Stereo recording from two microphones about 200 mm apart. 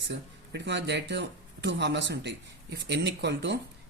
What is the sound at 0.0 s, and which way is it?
Speech, 60° right (ahead or behind).